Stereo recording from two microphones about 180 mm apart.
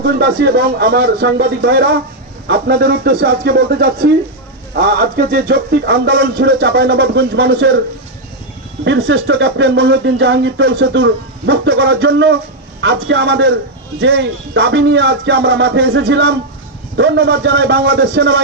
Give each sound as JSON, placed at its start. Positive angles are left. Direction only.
{"t": 0.0, "sound": "music", "side_deg": -60}
{"t": 8.8, "sound": "speech", "side_deg": -85}
{"t": 12.8, "sound": "speech", "side_deg": -85}